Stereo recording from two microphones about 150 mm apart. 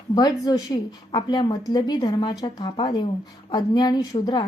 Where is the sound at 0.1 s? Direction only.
25° left (ahead or behind).